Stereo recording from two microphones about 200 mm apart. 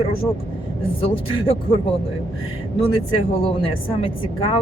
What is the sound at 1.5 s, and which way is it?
Speech, 25° left (ahead or behind).